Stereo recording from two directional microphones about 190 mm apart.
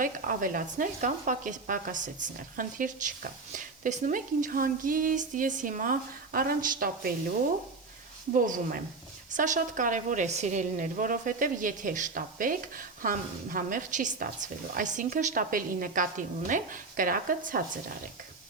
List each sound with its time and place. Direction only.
0.0 s a woman's voice: 45° right (ahead or behind)
8.4 s a woman's voice: 45° right (ahead or behind)